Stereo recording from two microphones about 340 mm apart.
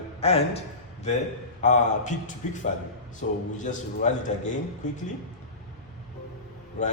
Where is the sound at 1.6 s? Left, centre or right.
Left.